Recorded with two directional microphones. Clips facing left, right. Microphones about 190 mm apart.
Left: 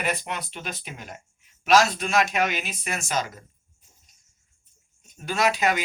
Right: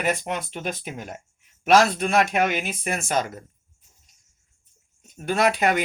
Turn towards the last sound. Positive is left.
turn(degrees=-55)  # may be behind; listen again after turning